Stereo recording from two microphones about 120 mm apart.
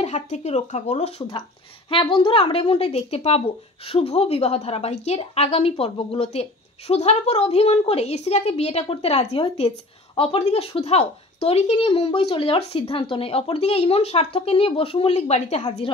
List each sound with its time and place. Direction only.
0.0 s speech: 70° left (ahead or behind); by 15.1 s 50° left (ahead or behind)
15.1 s speech: 70° left (ahead or behind)